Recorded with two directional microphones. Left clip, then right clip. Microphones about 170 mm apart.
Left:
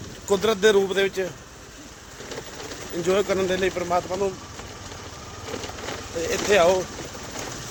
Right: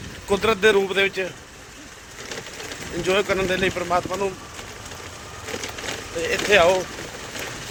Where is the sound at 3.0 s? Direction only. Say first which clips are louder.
Right 1 dB; 10° left (ahead or behind).